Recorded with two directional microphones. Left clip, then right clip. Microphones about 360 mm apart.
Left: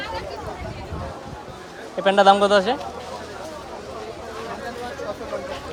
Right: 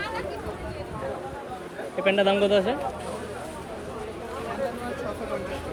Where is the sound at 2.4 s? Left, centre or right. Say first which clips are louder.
Left 5 dB; centre.